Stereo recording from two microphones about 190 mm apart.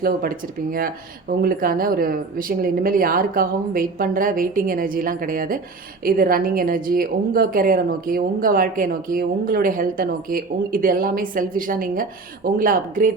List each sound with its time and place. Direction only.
0.0 s a woman's voice: 50° right (ahead or behind)